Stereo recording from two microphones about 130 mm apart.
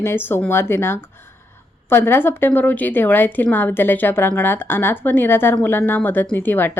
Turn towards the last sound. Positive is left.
turn(degrees=15)  # may be behind; listen again after turning